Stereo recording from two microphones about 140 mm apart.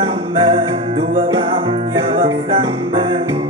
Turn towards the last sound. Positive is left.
turn(degrees=-40)  # may be behind; listen again after turning